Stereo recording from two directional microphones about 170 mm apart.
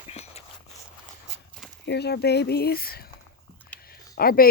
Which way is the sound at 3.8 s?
60° left (ahead or behind).